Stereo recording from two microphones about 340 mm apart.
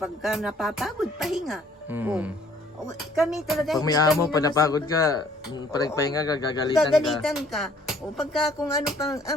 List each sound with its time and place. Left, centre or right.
0.0 s speech: centre
3.8 s a man's voice: centre
6.9 s speech: centre
9.0 s a man's voice: centre